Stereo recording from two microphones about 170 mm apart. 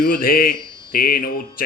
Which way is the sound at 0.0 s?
60° left (ahead or behind).